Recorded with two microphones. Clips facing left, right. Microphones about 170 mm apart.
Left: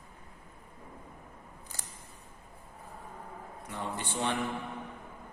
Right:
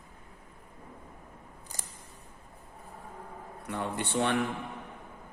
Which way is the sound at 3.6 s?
60° right (ahead or behind).